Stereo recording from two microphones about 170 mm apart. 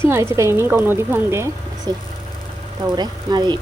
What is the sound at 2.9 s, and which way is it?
Speech, 25° right (ahead or behind).